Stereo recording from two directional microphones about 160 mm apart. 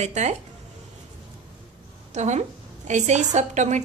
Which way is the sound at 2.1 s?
45° right (ahead or behind).